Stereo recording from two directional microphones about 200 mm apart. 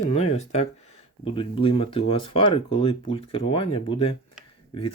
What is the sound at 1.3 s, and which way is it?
Speech, 25° left (ahead or behind).